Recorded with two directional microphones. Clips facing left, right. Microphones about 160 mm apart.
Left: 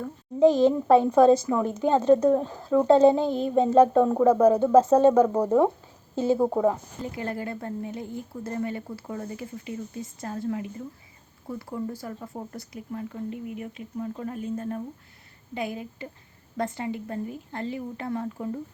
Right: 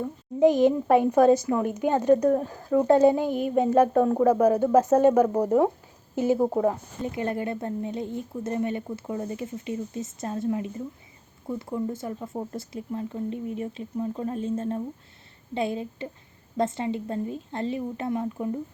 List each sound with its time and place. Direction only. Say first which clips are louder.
0.0 s speech: left 1 dB; 15° right (ahead or behind)